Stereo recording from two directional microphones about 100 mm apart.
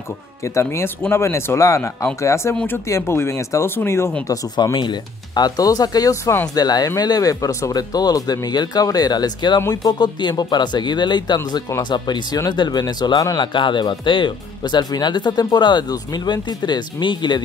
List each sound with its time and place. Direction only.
0.4 s speech: 30° left (ahead or behind)
4.7 s speech: 50° left (ahead or behind)
9.6 s speech: 35° left (ahead or behind)
9.9 s speech: 50° left (ahead or behind)